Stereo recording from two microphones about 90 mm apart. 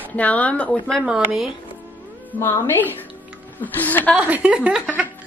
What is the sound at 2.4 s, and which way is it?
A woman's voice, 25° left (ahead or behind).